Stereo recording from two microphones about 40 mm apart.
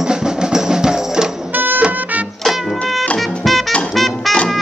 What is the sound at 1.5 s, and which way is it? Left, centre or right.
Music, right.